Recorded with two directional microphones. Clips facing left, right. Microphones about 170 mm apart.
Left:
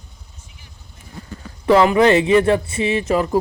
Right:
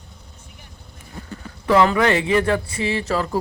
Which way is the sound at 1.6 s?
20° left (ahead or behind).